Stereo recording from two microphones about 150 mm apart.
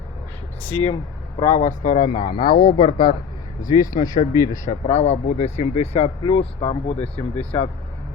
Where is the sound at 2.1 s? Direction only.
30° left (ahead or behind).